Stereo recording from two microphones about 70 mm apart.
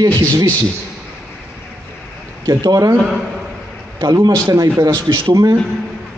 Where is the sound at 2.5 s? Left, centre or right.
Right.